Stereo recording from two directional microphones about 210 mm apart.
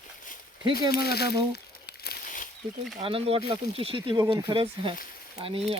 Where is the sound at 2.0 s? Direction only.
45° left (ahead or behind).